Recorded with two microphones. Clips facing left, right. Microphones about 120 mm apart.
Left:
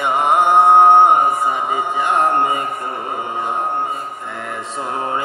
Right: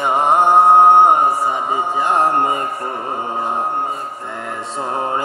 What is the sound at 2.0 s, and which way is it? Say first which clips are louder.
Music: even; 40° right (ahead or behind).